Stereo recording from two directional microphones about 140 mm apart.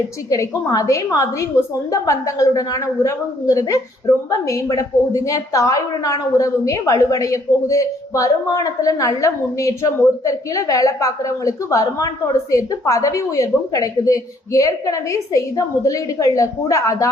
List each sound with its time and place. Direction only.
0.3 s a woman's voice: 25° left (ahead or behind)